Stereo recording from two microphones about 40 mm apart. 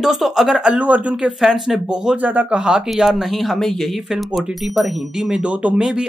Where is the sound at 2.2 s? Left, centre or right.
Right.